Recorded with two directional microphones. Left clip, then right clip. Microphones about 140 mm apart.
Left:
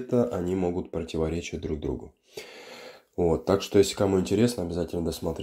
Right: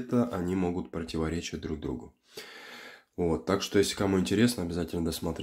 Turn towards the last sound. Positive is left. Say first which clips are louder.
# left 3 dB
turn(degrees=0)  # may be behind; listen again after turning